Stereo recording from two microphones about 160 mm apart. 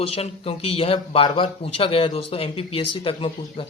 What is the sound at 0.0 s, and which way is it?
A man's voice, 40° left (ahead or behind).